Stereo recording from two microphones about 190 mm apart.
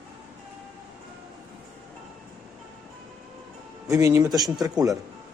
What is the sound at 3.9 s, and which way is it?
Speech, 15° right (ahead or behind).